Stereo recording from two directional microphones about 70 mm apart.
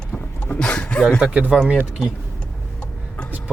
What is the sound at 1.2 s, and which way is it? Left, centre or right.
Speech, centre.